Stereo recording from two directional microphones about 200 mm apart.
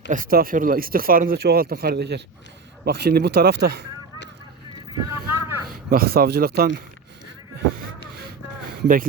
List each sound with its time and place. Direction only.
0.1 s speech: 45° right (ahead or behind)
5.3 s a sound: 10° right (ahead or behind)
5.9 s speech: 50° right (ahead or behind)
8.8 s speech: 45° right (ahead or behind)